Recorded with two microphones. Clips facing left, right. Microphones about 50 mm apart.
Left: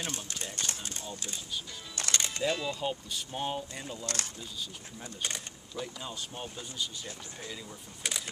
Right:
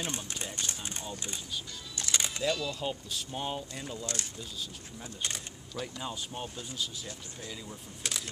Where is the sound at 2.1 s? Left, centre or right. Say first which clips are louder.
Even; centre.